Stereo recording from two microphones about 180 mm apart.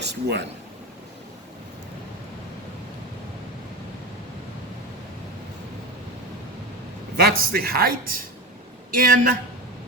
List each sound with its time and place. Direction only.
0.0 s speech: 70° right (ahead or behind)
7.2 s speech: 55° right (ahead or behind)